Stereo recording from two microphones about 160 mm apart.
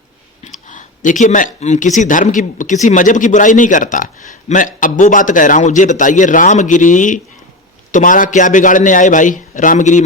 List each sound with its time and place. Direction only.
0.7 s speech: 50° left (ahead or behind)